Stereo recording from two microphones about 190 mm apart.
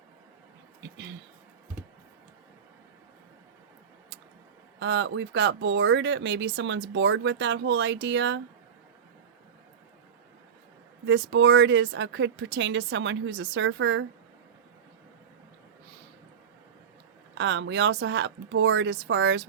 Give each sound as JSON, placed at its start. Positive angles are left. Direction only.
{"t": 0.8, "sound": "speech", "side_deg": -70}
{"t": 4.8, "sound": "speech", "side_deg": -70}
{"t": 11.0, "sound": "speech", "side_deg": -75}
{"t": 17.3, "sound": "speech", "side_deg": -70}